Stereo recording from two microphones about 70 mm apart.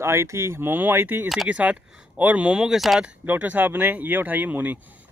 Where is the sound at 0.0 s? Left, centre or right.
Right; by 3.0 s centre.